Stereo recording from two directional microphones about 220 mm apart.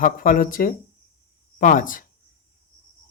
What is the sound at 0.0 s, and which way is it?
Speech, 40° left (ahead or behind).